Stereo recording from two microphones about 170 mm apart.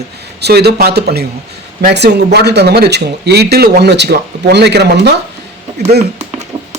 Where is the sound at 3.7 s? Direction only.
85° right.